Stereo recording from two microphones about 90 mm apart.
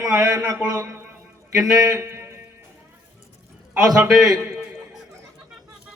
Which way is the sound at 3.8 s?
45° right (ahead or behind).